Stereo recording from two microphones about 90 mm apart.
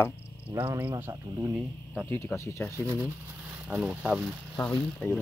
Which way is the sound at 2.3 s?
15° left (ahead or behind).